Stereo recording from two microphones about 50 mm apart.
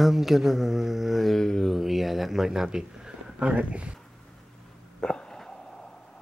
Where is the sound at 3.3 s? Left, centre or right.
Right.